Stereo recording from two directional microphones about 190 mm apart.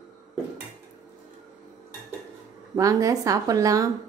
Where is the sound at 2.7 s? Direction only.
15° right (ahead or behind).